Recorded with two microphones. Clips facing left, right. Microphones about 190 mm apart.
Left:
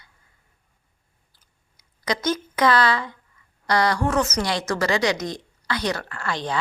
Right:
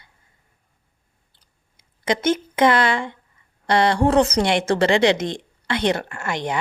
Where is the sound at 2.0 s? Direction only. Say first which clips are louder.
Right 4 dB; 25° right (ahead or behind).